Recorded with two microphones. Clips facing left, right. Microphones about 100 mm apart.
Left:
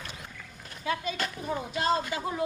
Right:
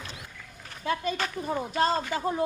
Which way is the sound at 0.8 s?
45° right (ahead or behind).